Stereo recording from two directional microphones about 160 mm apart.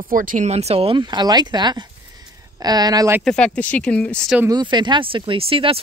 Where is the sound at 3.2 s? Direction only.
5° left (ahead or behind).